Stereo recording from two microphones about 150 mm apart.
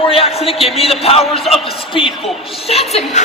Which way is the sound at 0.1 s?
40° left (ahead or behind).